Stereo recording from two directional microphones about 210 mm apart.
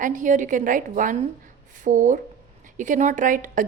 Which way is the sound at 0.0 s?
40° right (ahead or behind).